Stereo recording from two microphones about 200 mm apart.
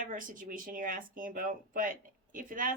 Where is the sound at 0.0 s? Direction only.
40° right (ahead or behind).